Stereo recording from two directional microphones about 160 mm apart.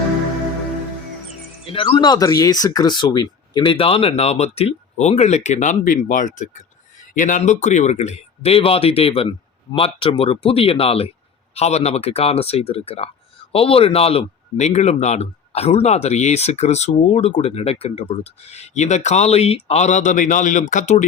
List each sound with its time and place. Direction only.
1.7 s speech: 30° left (ahead or behind); by 21.0 s 50° left (ahead or behind)